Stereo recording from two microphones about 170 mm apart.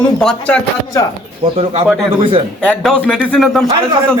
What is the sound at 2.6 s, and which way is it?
A man's voice, 5° left (ahead or behind).